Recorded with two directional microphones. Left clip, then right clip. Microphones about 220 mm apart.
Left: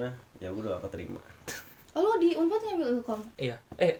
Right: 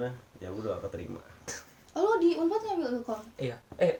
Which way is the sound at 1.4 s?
35° left (ahead or behind).